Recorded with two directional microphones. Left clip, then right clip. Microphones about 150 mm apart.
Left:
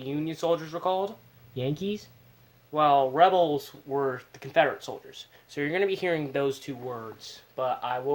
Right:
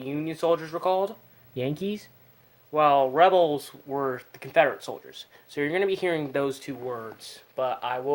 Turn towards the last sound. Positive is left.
turn(degrees=-35)  # may be behind; listen again after turning